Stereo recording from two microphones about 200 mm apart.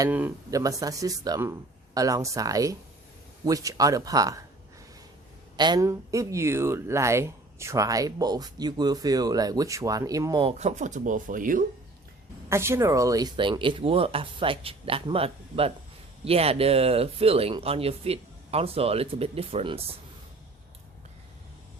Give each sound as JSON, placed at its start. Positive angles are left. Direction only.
{"t": 0.0, "sound": "speech", "side_deg": -10}
{"t": 5.5, "sound": "speech", "side_deg": -20}
{"t": 12.5, "sound": "speech", "side_deg": -15}